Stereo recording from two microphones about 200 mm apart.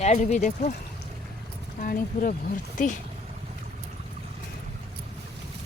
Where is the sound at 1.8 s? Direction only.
45° left (ahead or behind).